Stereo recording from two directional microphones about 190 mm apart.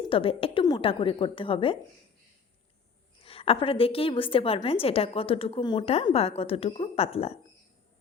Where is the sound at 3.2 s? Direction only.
30° left (ahead or behind).